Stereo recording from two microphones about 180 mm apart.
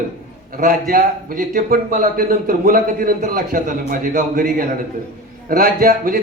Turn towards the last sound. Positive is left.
turn(degrees=-50)  # may be behind; listen again after turning